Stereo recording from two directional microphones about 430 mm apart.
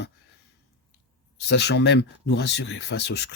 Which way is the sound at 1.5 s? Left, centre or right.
Left.